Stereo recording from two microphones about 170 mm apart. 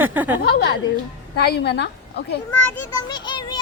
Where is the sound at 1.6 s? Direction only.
80° left.